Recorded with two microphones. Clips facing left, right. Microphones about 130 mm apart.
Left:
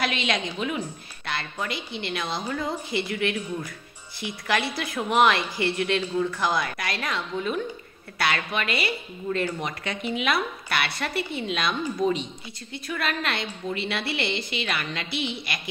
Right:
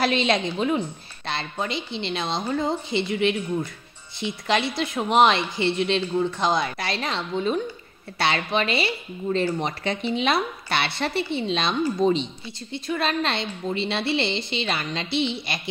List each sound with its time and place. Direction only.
0.0 s a woman's voice: 35° right (ahead or behind)